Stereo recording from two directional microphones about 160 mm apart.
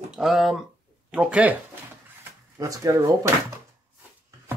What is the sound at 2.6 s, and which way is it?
Speech, 20° right (ahead or behind).